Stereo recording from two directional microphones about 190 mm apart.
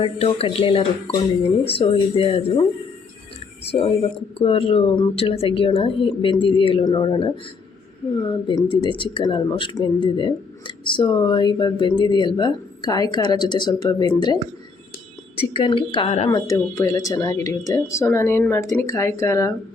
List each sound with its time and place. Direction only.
0.0 s speech: 30° left (ahead or behind)
3.6 s speech: 30° left (ahead or behind)
15.4 s speech: 25° left (ahead or behind)
16.3 s speech: 15° left (ahead or behind)